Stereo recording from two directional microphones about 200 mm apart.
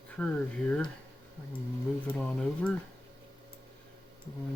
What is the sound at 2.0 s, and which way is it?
Speech, 5° left (ahead or behind).